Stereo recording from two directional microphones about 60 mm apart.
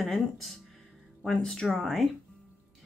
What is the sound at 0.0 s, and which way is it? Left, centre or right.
Speech, centre.